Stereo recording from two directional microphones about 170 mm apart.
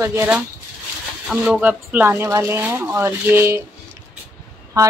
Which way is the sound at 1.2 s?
5° right (ahead or behind).